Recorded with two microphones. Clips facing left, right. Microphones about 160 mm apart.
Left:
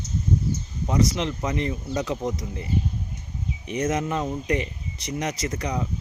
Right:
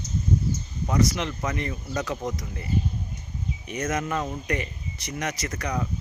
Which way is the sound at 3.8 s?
20° left (ahead or behind).